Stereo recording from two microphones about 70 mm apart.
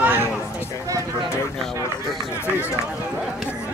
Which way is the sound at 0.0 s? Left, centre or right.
Right.